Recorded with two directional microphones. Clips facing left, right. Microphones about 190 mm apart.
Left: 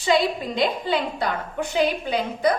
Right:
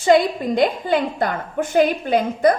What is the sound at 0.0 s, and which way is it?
A woman's voice, 50° right (ahead or behind).